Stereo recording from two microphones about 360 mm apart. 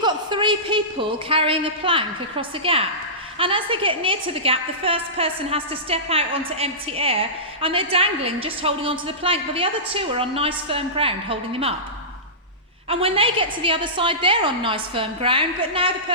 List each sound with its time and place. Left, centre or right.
0.0 s a woman's voice: centre
12.9 s a woman's voice: centre